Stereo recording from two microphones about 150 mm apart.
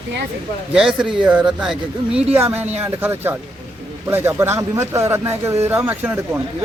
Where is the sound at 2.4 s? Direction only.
20° right (ahead or behind).